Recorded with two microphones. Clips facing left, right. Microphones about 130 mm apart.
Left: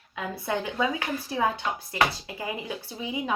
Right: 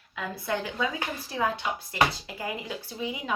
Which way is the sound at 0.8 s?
25° left (ahead or behind).